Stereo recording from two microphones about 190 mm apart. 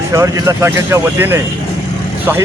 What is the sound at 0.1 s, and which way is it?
Speech, 15° right (ahead or behind).